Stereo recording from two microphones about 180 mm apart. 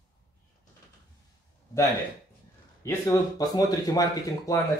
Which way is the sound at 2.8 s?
15° left (ahead or behind).